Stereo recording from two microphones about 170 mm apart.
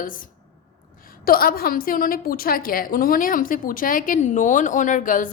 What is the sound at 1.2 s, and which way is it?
A woman's voice, 60° left (ahead or behind).